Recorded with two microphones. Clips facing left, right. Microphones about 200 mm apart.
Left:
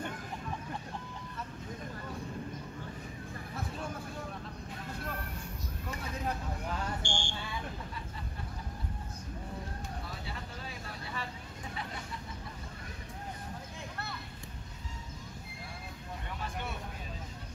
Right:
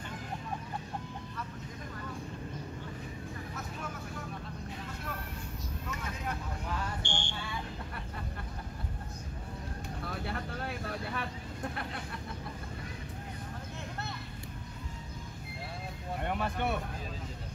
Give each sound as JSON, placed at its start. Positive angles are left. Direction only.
{"t": 7.0, "sound": "smoke detector", "side_deg": -60}
{"t": 10.0, "sound": "vehicle", "side_deg": -60}
{"t": 16.2, "sound": "a sound", "side_deg": -60}